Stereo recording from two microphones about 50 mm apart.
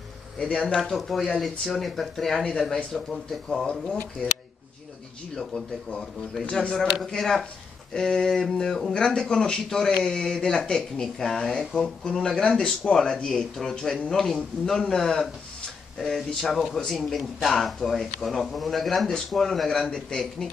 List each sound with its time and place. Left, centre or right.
0.4 s speech: centre
3.8 s speech: left
5.3 s speech: centre
6.4 s speech: left
6.8 s speech: centre